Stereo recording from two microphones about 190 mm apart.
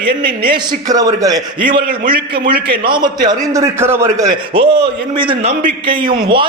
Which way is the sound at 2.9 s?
20° right (ahead or behind).